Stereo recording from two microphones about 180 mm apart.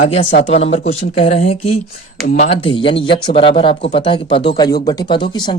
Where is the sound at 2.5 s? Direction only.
30° left (ahead or behind).